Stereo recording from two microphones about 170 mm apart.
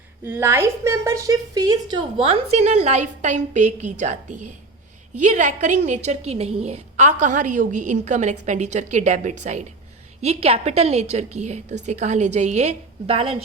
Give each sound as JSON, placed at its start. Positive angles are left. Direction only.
{"t": 0.3, "sound": "a woman's voice", "side_deg": -15}